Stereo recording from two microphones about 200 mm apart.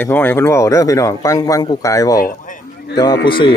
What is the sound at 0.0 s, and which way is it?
A man's voice, 10° left (ahead or behind).